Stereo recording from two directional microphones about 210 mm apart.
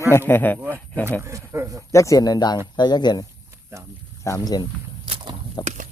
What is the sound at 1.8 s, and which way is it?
Speech, 15° left (ahead or behind).